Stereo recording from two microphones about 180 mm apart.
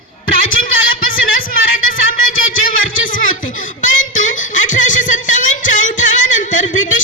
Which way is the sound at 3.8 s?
45° left (ahead or behind).